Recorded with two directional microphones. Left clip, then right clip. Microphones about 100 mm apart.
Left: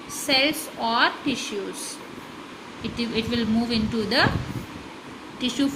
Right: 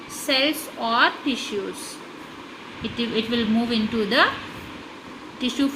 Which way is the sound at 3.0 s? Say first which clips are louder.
Right 2 dB; 25° right (ahead or behind).